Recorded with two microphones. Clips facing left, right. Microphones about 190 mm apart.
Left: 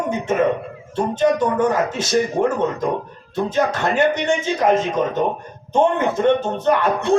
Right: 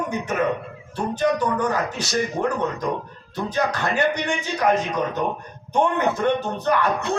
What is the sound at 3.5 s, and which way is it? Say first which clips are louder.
A man's voice: left 3 dB; 25° left (ahead or behind).